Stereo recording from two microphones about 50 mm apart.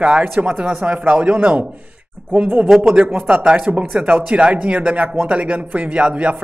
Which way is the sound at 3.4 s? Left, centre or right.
Centre.